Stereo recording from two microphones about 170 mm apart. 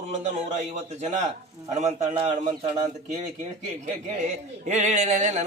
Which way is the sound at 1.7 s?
45° right (ahead or behind).